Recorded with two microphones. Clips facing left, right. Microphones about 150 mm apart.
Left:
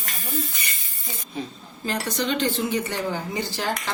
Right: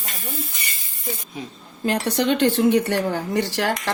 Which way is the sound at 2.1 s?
65° right (ahead or behind).